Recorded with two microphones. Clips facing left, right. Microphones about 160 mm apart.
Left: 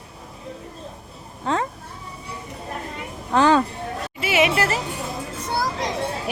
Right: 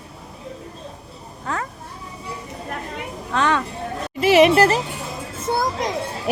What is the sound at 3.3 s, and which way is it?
Speech, 30° left (ahead or behind).